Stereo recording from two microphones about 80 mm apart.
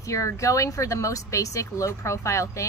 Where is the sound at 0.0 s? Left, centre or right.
Left.